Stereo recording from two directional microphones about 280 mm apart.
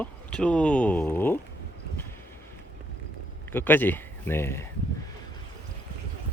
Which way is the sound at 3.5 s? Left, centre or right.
Centre.